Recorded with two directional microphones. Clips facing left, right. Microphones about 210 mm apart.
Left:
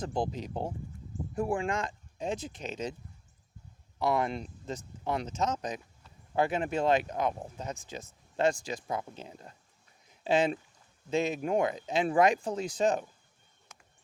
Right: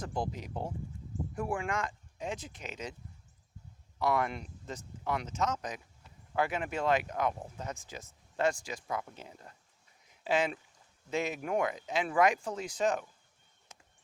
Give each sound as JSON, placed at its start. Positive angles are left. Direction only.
{"t": 0.0, "sound": "speech", "side_deg": 30}
{"t": 3.9, "sound": "speech", "side_deg": 25}
{"t": 13.7, "sound": "a sound", "side_deg": -30}